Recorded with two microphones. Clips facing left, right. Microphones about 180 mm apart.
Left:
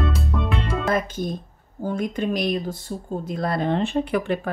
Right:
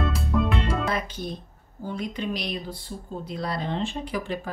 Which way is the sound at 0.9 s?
45° left (ahead or behind).